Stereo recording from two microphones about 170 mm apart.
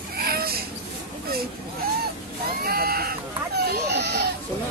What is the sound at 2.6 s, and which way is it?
Speech, 60° right (ahead or behind).